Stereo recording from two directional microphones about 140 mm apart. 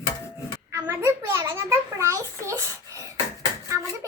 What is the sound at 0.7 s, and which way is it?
A child's voice, 25° right (ahead or behind).